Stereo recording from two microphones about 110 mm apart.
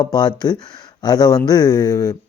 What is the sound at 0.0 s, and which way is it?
Speech, 40° left (ahead or behind).